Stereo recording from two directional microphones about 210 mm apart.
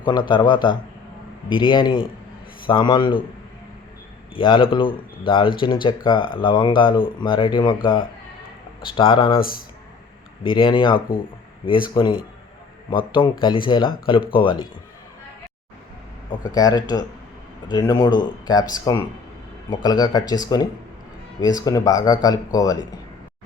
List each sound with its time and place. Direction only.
0.0 s speech: 20° left (ahead or behind)
4.4 s speech: 25° left (ahead or behind)
8.8 s speech: 20° left (ahead or behind)
9.4 s speech: 45° left (ahead or behind)
10.4 s speech: 25° left (ahead or behind)
13.4 s speech: 20° left (ahead or behind)
16.3 s speech: 20° left (ahead or behind)